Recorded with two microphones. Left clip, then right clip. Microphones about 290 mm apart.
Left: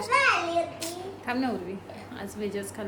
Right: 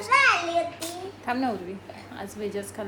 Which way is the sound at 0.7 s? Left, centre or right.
Centre.